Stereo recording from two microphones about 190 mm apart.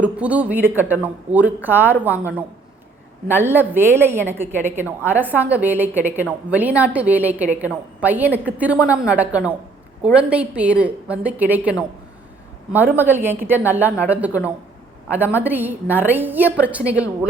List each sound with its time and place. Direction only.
0.0 s a woman's voice: 5° right (ahead or behind)